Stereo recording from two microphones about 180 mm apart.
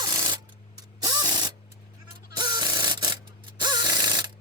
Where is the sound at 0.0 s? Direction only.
25° right (ahead or behind).